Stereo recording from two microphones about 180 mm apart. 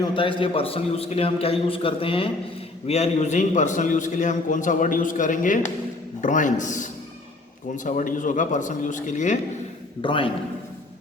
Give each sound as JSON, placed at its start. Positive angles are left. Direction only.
{"t": 0.0, "sound": "a man's voice", "side_deg": 30}
{"t": 10.0, "sound": "a man's voice", "side_deg": 30}